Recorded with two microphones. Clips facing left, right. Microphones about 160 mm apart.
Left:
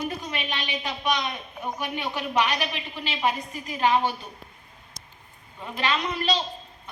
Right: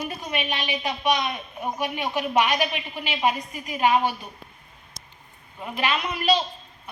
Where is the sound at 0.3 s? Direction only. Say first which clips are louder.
Right 3 dB; 20° right (ahead or behind).